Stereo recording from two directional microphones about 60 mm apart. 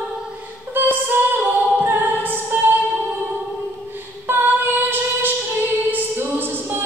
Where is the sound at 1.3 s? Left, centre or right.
Right.